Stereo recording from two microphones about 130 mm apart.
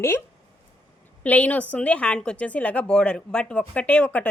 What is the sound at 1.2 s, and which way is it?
A woman's voice, 10° left (ahead or behind).